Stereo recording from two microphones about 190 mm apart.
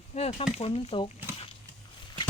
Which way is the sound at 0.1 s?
30° left (ahead or behind).